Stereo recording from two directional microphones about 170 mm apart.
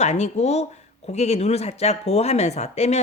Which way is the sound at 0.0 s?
40° left (ahead or behind).